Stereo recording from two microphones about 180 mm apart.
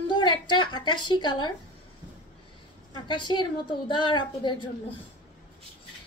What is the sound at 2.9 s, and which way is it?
A woman's voice, 25° left (ahead or behind).